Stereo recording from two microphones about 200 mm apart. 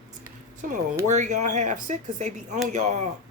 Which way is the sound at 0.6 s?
40° right (ahead or behind).